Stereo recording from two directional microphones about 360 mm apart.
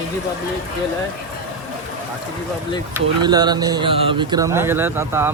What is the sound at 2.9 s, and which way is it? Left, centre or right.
Speech, centre.